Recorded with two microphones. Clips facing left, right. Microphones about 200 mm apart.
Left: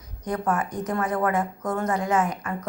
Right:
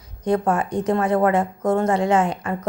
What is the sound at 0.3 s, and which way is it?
A woman's voice, 30° right (ahead or behind).